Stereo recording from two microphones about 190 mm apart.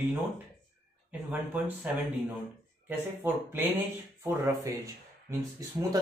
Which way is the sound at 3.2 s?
10° right (ahead or behind).